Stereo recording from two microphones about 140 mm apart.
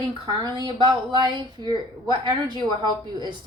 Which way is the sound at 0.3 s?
30° right (ahead or behind).